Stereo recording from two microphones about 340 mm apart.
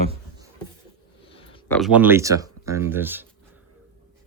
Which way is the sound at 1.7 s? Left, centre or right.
Centre.